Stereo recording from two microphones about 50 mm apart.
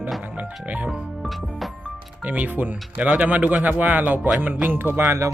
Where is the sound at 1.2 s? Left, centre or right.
Centre.